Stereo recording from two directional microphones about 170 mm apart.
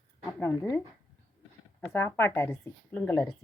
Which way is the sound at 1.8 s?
15° left (ahead or behind).